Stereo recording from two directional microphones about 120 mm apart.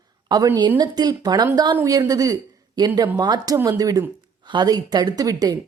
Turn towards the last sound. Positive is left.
turn(degrees=-35)  # may be behind; listen again after turning